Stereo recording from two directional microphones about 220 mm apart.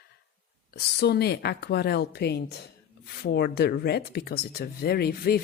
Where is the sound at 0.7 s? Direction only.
50° left (ahead or behind).